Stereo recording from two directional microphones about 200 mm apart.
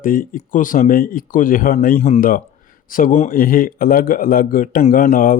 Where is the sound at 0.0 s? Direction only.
45° left (ahead or behind).